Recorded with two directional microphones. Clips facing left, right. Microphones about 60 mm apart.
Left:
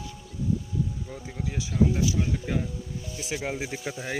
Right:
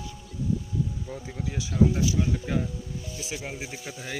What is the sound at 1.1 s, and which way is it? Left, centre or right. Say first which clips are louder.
Speech: right 1 dB; centre.